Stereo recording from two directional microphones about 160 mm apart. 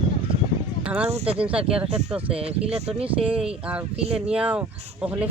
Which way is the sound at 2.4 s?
40° right (ahead or behind).